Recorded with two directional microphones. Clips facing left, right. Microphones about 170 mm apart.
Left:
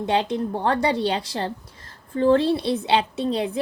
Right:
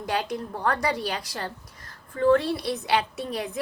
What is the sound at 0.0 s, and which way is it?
A woman's voice, 25° left (ahead or behind).